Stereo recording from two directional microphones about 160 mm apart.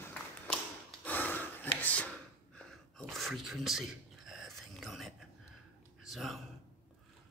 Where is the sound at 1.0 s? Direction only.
10° left (ahead or behind).